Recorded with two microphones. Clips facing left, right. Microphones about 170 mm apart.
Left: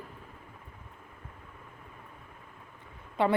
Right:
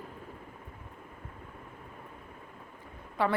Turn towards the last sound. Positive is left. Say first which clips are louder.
# left 2 dB
turn(degrees=25)  # may be behind; listen again after turning